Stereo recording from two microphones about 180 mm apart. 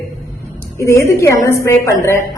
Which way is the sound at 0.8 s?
15° left (ahead or behind).